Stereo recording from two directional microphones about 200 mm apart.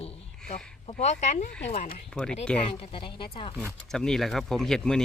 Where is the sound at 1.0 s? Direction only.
35° left (ahead or behind).